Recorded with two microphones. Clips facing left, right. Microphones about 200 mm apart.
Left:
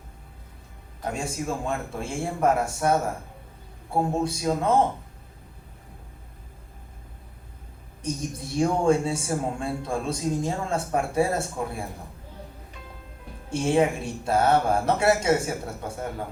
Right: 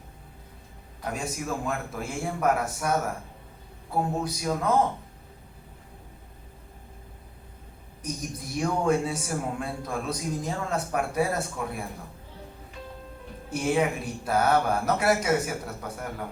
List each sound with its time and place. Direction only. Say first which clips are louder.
1.0 s speech: left 2 dB; 25° left (ahead or behind)
8.0 s speech: left 4 dB; 25° left (ahead or behind)
13.5 s speech: left 3 dB; 25° left (ahead or behind)